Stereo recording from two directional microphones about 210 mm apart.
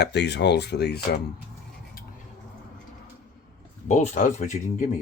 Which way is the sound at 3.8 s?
35° left (ahead or behind).